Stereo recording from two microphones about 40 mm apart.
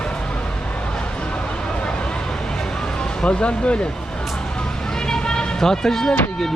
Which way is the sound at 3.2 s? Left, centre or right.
Left.